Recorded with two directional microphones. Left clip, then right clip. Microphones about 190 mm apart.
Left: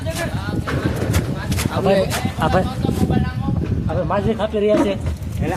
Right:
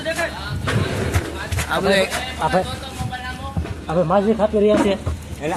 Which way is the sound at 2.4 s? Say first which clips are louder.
Left 1 dB; 15° left (ahead or behind).